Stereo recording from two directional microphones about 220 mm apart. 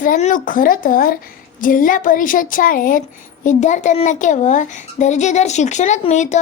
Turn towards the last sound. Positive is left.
turn(degrees=30)  # may be behind; listen again after turning